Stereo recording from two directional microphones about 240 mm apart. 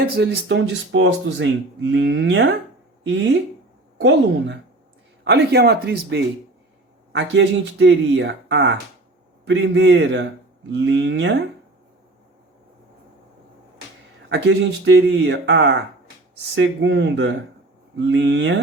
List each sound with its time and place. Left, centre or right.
0.0 s speech: right
5.2 s speech: right
14.3 s speech: right